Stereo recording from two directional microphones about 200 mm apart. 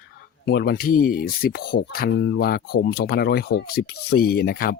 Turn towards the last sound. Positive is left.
turn(degrees=50)  # may be behind; listen again after turning